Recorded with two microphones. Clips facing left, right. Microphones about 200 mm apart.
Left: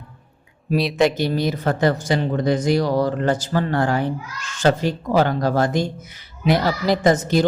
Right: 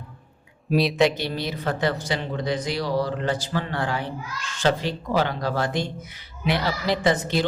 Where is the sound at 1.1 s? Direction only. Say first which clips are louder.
Left 7 dB; 45° left (ahead or behind).